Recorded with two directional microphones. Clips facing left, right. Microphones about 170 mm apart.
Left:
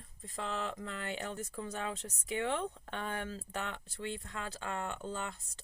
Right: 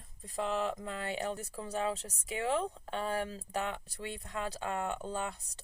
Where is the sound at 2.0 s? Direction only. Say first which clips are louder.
Left 2 dB; 10° right (ahead or behind).